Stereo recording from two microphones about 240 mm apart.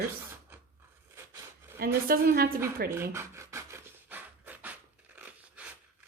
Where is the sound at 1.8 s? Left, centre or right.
Right.